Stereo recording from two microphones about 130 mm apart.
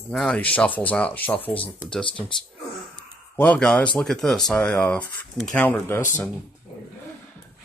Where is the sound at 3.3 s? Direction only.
10° left (ahead or behind).